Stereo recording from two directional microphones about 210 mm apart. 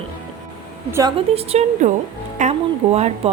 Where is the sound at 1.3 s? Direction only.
30° right (ahead or behind).